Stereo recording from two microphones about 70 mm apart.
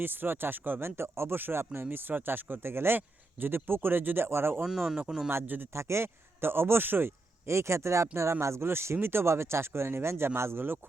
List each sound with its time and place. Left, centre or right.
0.0 s speech: right
4.6 s speech: centre
5.3 s speech: right